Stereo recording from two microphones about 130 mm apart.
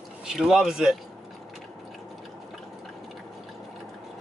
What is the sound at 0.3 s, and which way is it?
Speech, 5° right (ahead or behind).